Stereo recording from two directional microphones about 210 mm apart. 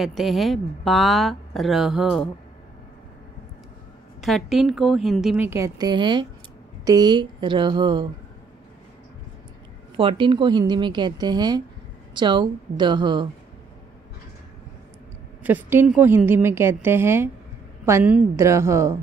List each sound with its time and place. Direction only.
0.0 s speech: centre (ahead or behind)
4.2 s a woman's voice: centre (ahead or behind); by 8.1 s 20° right (ahead or behind)
9.9 s a woman's voice: 25° right (ahead or behind)
15.4 s a woman's voice: 10° right (ahead or behind)